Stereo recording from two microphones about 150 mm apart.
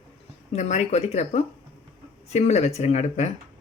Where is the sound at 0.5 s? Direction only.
50° left (ahead or behind).